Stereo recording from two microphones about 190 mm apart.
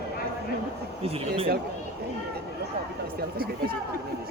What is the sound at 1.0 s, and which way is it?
Speech, 30° right (ahead or behind).